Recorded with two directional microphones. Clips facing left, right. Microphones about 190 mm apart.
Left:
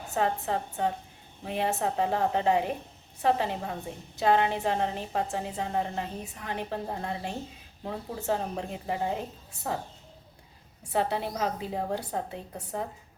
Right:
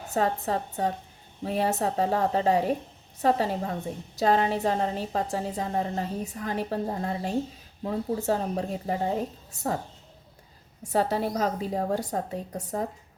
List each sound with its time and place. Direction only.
0.1 s a woman's voice: 40° right (ahead or behind)
10.9 s a woman's voice: 40° right (ahead or behind)